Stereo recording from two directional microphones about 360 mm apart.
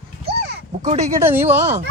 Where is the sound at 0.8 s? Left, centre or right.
Centre.